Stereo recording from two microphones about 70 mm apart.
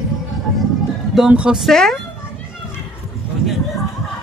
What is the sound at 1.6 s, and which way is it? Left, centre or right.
Speech, centre.